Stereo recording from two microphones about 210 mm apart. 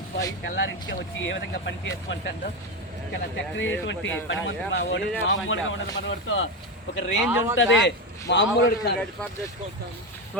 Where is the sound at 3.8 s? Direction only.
60° left (ahead or behind).